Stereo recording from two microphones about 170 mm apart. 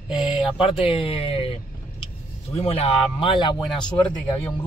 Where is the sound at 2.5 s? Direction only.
35° left (ahead or behind).